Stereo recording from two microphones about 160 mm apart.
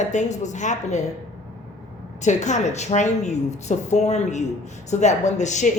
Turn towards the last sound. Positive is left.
turn(degrees=50)  # may be behind; listen again after turning